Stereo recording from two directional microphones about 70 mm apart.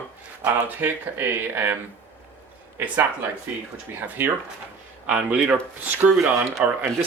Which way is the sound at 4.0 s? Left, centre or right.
Right.